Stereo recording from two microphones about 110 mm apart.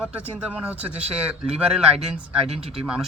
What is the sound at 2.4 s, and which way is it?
Speech, 70° right (ahead or behind).